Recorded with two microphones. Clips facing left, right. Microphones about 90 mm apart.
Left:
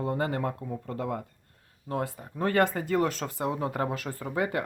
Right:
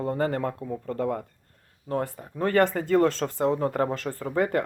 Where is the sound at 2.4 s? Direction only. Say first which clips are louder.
Right 3 dB; 20° left (ahead or behind).